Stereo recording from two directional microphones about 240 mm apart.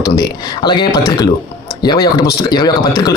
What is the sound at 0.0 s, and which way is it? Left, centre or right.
A man's voice, centre.